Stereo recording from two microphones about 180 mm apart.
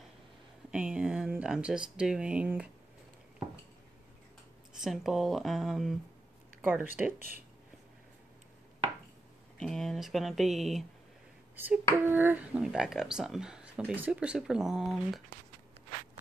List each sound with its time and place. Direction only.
0.7 s speech: 5° right (ahead or behind)
4.8 s speech: centre (ahead or behind)
7.2 s speech: 55° right (ahead or behind)
9.6 s speech: 5° left (ahead or behind)